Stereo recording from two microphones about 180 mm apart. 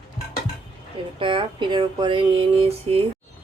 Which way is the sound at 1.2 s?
30° right (ahead or behind).